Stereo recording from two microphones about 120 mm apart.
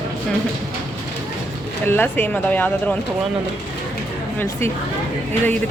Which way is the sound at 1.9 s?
15° left (ahead or behind).